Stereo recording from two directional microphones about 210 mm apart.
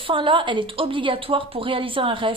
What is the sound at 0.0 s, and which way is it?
A woman's voice, 25° right (ahead or behind).